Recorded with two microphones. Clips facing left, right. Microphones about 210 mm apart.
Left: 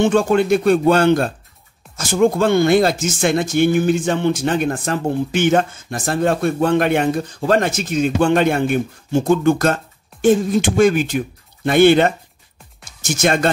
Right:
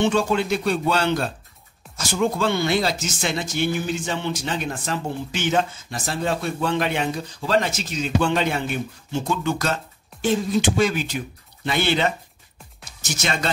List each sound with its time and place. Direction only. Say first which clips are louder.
0.0 s speech: left 6 dB; 50° left (ahead or behind)